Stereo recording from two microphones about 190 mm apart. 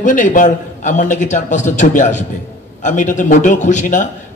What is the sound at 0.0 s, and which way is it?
A man's voice, 45° left (ahead or behind).